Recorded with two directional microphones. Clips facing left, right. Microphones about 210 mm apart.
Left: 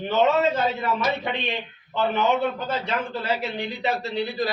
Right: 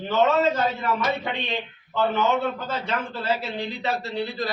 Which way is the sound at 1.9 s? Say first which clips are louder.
Even; 15° left (ahead or behind).